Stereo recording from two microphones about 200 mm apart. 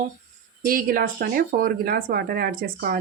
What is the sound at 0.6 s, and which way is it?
Speech, 45° right (ahead or behind).